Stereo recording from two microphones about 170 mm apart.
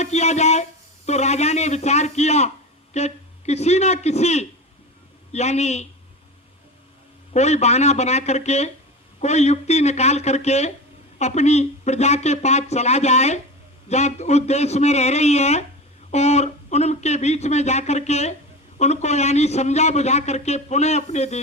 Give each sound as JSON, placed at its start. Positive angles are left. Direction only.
{"t": 0.0, "sound": "a man's voice", "side_deg": 40}
{"t": 7.3, "sound": "a man's voice", "side_deg": 40}